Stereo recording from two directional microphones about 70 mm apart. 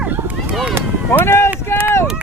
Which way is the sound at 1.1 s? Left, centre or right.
Left.